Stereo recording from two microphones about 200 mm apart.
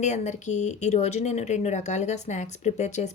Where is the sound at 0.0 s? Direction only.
35° left (ahead or behind).